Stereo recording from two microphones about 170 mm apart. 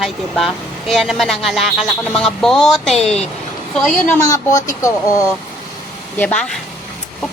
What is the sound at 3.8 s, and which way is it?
Speech, 15° left (ahead or behind).